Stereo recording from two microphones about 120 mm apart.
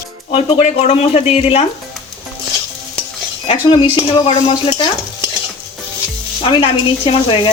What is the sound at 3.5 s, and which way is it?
Speech, 45° left (ahead or behind).